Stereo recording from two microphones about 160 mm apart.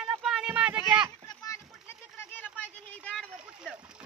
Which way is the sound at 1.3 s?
20° left (ahead or behind).